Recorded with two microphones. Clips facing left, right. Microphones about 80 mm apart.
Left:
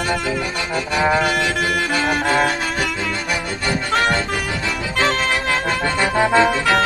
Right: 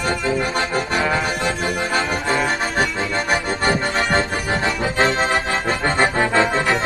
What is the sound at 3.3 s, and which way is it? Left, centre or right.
Accordion, right.